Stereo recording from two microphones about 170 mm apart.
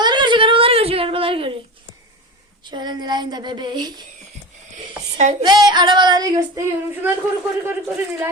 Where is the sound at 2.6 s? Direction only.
25° right (ahead or behind).